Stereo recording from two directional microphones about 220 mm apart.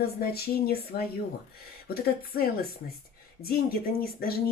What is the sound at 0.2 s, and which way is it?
Speech, 45° left (ahead or behind).